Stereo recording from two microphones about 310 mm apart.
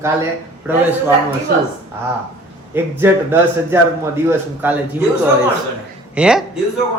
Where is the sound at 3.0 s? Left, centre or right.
Centre.